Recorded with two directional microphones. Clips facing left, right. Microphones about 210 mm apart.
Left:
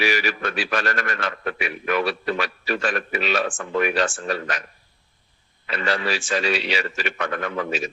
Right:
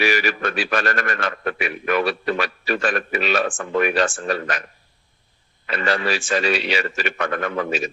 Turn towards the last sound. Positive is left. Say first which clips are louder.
# right 2 dB
turn(degrees=-50)  # may be behind; listen again after turning